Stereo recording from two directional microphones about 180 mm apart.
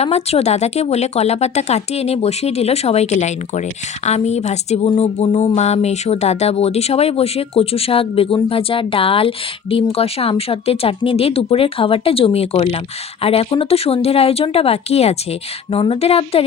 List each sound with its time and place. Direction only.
0.0 s speech: 35° left (ahead or behind)